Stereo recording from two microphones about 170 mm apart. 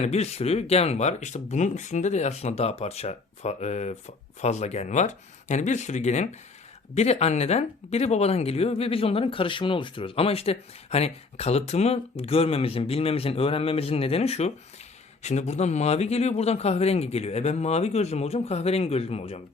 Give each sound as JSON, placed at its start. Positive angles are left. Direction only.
{"t": 0.0, "sound": "speech", "side_deg": 40}